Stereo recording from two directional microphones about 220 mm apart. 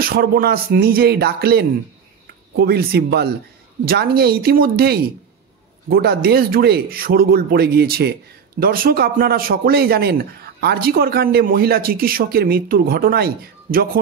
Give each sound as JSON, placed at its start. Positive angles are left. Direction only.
{"t": 0.0, "sound": "speech", "side_deg": -40}